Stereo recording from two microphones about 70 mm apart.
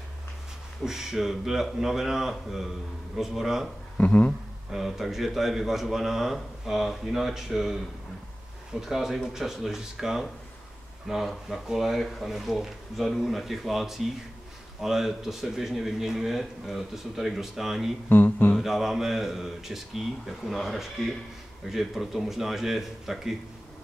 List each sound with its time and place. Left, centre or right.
0.8 s a man's voice: centre
4.0 s speech: left
4.6 s a man's voice: centre
18.0 s speech: left
18.6 s a man's voice: centre